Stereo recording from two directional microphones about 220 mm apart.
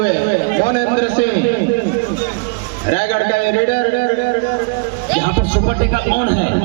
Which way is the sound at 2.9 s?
40° left (ahead or behind).